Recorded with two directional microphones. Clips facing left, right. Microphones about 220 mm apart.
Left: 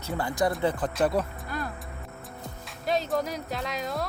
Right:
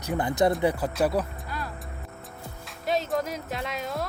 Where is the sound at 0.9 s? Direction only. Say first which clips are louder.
Even; centre (ahead or behind).